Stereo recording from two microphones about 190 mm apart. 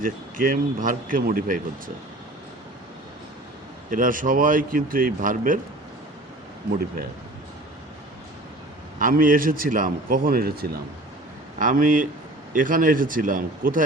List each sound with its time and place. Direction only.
0.0 s speech: 45° right (ahead or behind)
3.8 s speech: 45° right (ahead or behind)
9.0 s speech: 45° right (ahead or behind)